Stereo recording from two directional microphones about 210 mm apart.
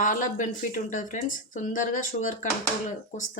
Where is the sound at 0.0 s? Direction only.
40° left (ahead or behind).